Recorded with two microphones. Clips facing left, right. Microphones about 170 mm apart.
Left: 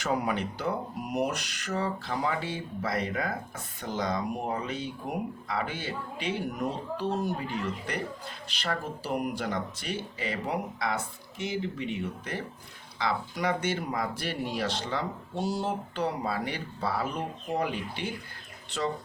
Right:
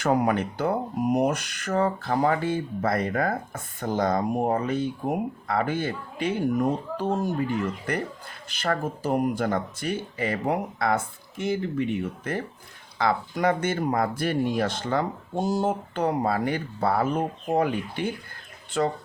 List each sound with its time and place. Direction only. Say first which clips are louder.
0.0 s speech: right 6 dB; 50° right (ahead or behind)
8.4 s speech: right 6 dB; 50° right (ahead or behind)